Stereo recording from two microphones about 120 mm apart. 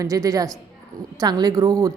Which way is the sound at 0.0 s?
30° right (ahead or behind).